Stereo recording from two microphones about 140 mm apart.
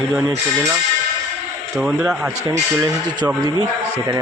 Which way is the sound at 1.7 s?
5° right (ahead or behind).